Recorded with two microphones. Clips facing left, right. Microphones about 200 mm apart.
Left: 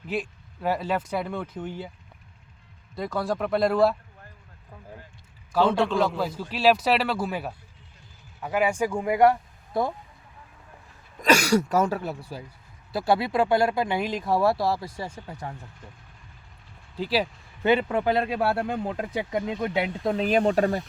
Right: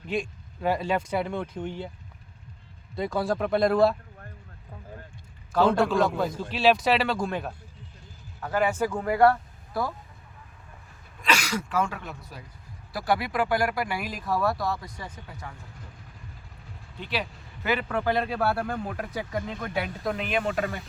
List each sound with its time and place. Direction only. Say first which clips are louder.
0.1 s speech: even; 5° left (ahead or behind)
2.9 s speech: right 1 dB; centre (ahead or behind)
5.5 s a man's voice: even; 5° right (ahead or behind)
6.0 s speech: even; 10° left (ahead or behind)
11.2 s a man's voice: left 7 dB; 40° left (ahead or behind)
17.0 s a man's voice: left 7 dB; 30° left (ahead or behind)